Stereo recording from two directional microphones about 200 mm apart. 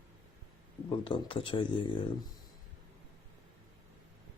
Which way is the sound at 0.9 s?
25° left (ahead or behind).